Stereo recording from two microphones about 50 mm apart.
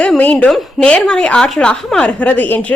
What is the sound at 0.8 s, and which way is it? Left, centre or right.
A woman's voice, centre.